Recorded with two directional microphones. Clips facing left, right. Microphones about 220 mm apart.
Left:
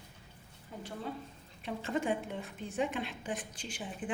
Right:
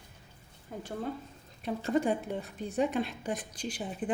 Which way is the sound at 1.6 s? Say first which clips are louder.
Right 5 dB; 40° right (ahead or behind).